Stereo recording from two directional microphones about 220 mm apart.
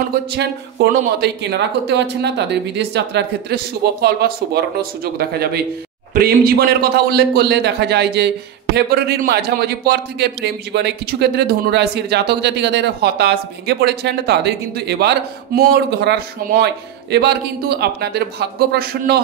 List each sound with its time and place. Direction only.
0.3 s a man's voice: 50° right (ahead or behind)